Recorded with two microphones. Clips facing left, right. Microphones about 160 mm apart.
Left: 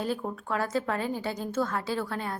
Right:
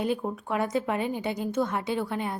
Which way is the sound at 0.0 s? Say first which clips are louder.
Right 3 dB; 15° right (ahead or behind).